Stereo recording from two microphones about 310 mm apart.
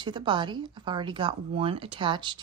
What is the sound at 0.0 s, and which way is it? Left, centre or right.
Speech, centre.